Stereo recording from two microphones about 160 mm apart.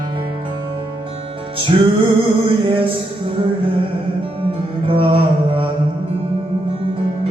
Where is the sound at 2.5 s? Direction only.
35° right (ahead or behind).